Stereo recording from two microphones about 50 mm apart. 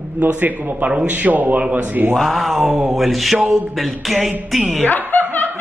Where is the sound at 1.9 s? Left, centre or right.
Right.